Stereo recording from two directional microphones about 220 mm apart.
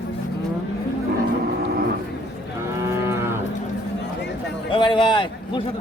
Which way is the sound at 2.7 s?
15° right (ahead or behind).